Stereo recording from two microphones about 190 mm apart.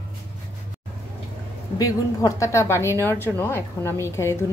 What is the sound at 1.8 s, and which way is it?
A woman's voice, 15° left (ahead or behind).